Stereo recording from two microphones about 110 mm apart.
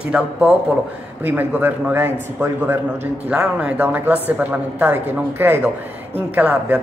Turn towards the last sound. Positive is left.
turn(degrees=-15)  # may be behind; listen again after turning